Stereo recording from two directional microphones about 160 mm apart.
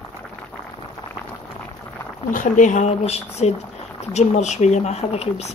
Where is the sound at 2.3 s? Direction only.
55° left (ahead or behind).